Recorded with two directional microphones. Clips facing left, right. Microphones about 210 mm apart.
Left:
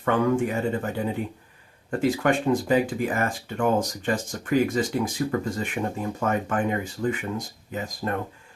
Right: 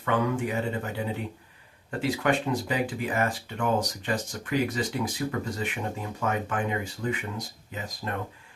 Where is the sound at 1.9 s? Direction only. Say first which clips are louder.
Left 4 dB; 45° left (ahead or behind).